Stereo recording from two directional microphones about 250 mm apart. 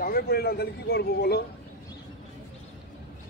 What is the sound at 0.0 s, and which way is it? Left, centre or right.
Speech, left.